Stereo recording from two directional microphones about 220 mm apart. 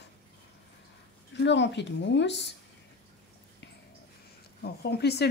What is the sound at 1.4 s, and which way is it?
Speech, 55° left (ahead or behind).